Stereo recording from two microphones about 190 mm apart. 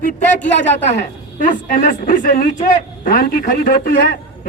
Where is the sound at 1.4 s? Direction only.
45° left (ahead or behind).